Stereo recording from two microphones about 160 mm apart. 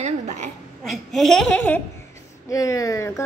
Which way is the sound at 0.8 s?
Centre (ahead or behind).